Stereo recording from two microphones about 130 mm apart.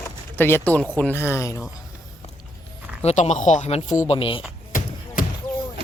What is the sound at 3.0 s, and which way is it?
Speech, 60° left (ahead or behind).